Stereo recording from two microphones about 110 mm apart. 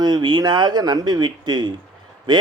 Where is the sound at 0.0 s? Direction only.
40° right (ahead or behind).